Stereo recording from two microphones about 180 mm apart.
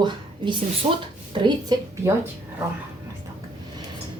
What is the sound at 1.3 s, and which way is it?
Speech, 25° right (ahead or behind).